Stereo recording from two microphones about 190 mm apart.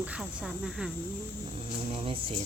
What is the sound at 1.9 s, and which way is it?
Speech, 30° right (ahead or behind).